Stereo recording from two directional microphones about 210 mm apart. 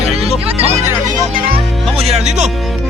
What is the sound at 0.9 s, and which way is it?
Music, 15° right (ahead or behind).